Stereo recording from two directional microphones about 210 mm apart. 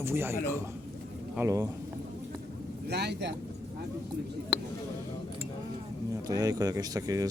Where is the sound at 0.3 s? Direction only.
10° left (ahead or behind).